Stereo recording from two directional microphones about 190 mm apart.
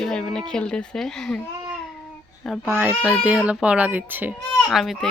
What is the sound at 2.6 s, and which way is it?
Speech, 10° right (ahead or behind).